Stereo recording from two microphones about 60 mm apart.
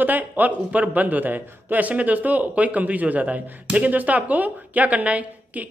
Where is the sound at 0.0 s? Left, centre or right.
Right.